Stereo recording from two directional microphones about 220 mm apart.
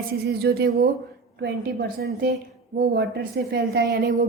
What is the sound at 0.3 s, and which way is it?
A woman's voice, 45° right (ahead or behind).